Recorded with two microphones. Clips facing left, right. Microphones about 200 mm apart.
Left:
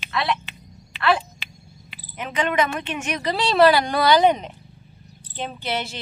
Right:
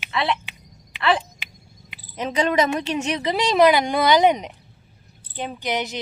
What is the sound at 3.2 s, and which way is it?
Speech, 20° right (ahead or behind).